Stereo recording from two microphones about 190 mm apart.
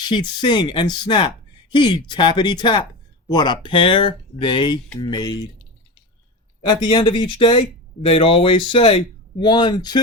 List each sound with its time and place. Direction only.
0.0 s speech: 20° left (ahead or behind)
6.8 s speech: 25° left (ahead or behind)